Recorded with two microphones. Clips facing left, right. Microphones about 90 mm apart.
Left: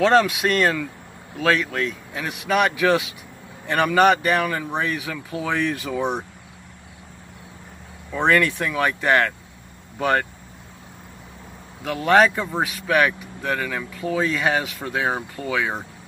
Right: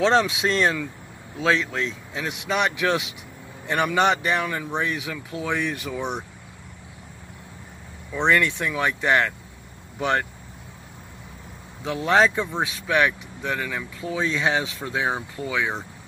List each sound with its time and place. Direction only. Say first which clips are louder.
0.0 s speech: left 3 dB; 20° right (ahead or behind)
5.9 s speech: left 6 dB; 15° left (ahead or behind)
8.3 s speech: left 2 dB; 20° right (ahead or behind)
11.8 s speech: left 3 dB; 20° right (ahead or behind)
12.4 s speech: left 1 dB; 15° left (ahead or behind)
12.8 s speech: left 2 dB; 15° right (ahead or behind)